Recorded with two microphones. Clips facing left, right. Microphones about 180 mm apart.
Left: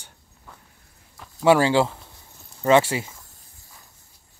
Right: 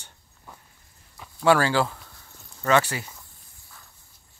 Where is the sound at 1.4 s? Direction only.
20° left (ahead or behind).